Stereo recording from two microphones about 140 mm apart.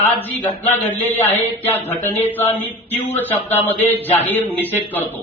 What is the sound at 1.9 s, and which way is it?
A man's voice, 15° left (ahead or behind).